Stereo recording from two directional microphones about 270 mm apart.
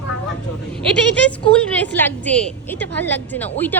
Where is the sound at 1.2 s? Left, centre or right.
Centre.